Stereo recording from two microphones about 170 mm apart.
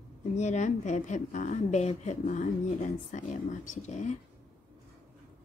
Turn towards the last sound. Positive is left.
turn(degrees=45)  # may be behind; listen again after turning